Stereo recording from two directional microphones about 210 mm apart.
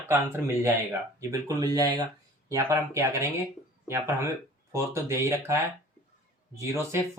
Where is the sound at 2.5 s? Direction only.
15° right (ahead or behind).